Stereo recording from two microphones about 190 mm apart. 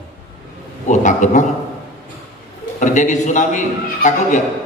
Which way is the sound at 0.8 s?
40° left (ahead or behind).